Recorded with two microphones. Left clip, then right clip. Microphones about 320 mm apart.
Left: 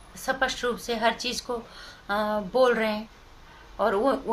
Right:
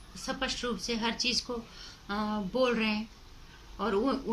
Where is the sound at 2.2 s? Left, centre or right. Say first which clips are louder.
Left 8 dB; left.